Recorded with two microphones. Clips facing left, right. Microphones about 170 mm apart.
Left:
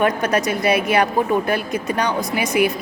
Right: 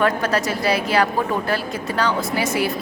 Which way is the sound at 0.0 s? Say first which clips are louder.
Left 1 dB; 20° left (ahead or behind).